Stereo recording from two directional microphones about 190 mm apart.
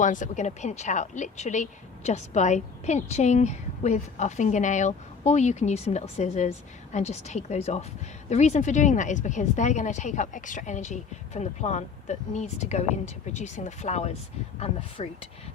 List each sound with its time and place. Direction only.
0.0 s a woman's voice: 40° left (ahead or behind)